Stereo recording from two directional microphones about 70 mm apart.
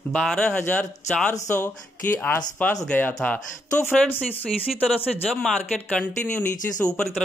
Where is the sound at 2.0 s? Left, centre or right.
Left.